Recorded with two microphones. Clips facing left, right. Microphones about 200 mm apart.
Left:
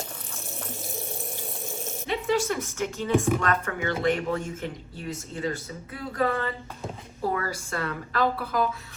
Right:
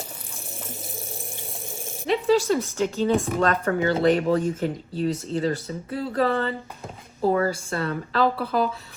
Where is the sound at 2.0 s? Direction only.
35° right (ahead or behind).